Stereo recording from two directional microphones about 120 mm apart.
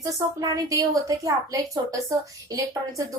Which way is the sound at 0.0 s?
30° right (ahead or behind).